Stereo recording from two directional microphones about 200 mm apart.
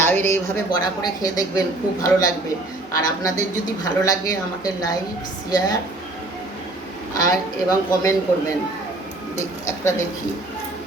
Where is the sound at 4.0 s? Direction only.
20° left (ahead or behind).